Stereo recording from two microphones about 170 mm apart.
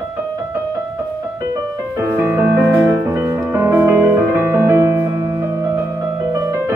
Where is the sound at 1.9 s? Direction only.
15° right (ahead or behind).